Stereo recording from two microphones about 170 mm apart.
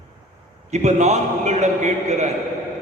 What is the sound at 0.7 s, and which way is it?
A man's voice, 40° right (ahead or behind).